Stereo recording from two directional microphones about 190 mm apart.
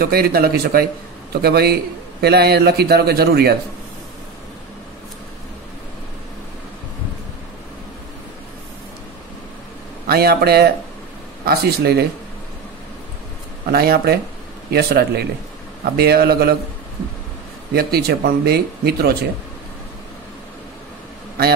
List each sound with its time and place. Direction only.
0.0 s speech: 55° right (ahead or behind)
10.0 s speech: 55° right (ahead or behind)
13.7 s speech: 55° right (ahead or behind)
17.7 s speech: 55° right (ahead or behind)